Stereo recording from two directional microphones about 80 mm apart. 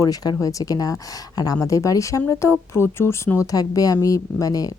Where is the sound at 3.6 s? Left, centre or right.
Left.